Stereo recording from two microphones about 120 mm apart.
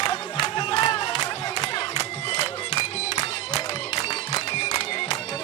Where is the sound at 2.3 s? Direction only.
40° left (ahead or behind).